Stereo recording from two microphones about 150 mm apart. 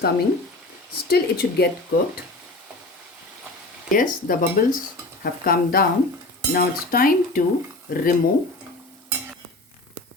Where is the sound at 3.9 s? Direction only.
70° left (ahead or behind).